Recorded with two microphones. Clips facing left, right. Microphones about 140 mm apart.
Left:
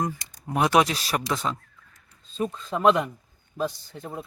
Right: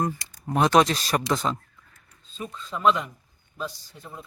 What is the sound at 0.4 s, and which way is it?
Speech, 10° left (ahead or behind).